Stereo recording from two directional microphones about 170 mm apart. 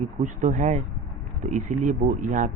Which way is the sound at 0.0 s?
45° right (ahead or behind).